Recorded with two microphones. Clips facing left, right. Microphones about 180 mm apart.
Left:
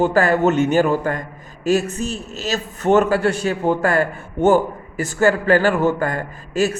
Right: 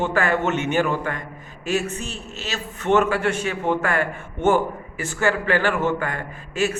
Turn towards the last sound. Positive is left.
turn(degrees=40)  # may be behind; listen again after turning